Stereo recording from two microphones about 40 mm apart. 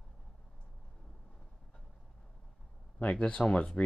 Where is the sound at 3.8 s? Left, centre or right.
Left.